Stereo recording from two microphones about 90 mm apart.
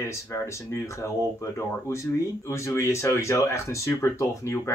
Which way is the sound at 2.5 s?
35° left (ahead or behind).